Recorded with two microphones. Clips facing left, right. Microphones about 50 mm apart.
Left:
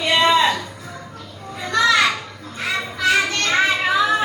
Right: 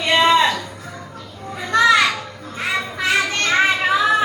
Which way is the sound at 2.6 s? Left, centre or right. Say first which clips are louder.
Left 1 dB; right.